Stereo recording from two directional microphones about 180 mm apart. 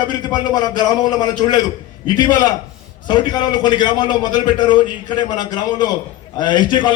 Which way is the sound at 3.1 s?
25° left (ahead or behind).